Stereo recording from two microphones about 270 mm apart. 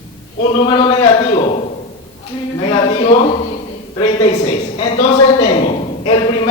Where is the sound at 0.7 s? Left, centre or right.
Centre.